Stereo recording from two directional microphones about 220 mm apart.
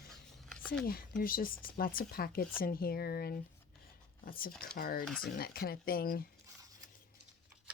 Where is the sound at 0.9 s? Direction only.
45° left (ahead or behind).